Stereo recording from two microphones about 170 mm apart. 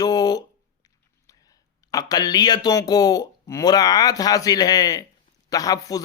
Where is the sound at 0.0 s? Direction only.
25° left (ahead or behind).